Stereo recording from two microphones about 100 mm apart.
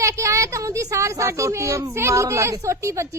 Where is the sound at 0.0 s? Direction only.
30° right (ahead or behind).